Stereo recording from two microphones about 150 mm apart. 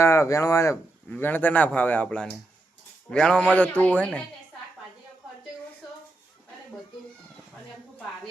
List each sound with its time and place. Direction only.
0.0 s speech: 20° left (ahead or behind)